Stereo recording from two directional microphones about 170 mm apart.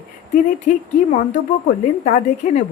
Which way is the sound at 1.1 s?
45° left (ahead or behind).